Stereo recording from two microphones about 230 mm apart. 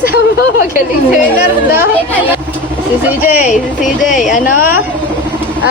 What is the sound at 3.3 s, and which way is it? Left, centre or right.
Speech, left.